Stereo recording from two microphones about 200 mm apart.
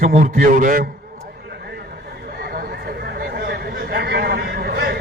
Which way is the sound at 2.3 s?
50° right (ahead or behind).